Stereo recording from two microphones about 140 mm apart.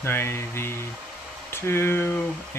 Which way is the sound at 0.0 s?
15° left (ahead or behind).